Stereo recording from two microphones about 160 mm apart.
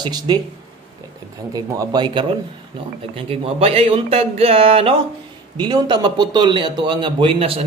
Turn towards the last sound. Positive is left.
turn(degrees=-35)  # may be behind; listen again after turning